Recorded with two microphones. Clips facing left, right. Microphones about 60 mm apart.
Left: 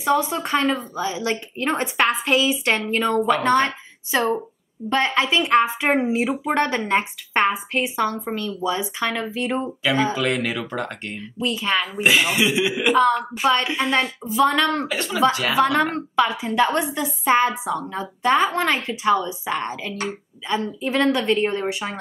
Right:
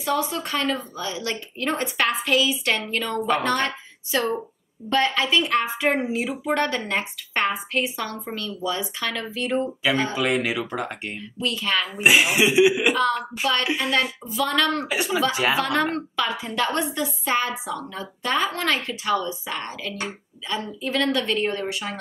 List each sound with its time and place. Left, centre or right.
0.0 s a woman's voice: left
10.1 s speech: centre
11.4 s a woman's voice: centre
12.0 s speech: centre
13.4 s a woman's voice: left
14.9 s speech: centre
15.5 s a woman's voice: left